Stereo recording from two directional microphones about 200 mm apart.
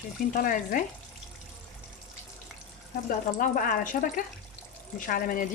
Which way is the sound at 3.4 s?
40° left (ahead or behind).